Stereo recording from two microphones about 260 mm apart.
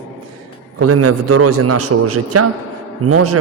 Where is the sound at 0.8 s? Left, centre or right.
Right.